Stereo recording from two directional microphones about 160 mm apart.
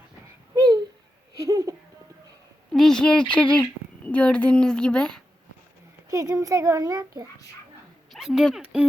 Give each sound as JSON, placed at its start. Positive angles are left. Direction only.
{"t": 0.5, "sound": "babbling", "side_deg": -20}
{"t": 1.4, "sound": "a sound", "side_deg": -20}
{"t": 2.7, "sound": "a woman's voice", "side_deg": 5}
{"t": 6.1, "sound": "a child's voice", "side_deg": -20}
{"t": 8.1, "sound": "speech", "side_deg": 0}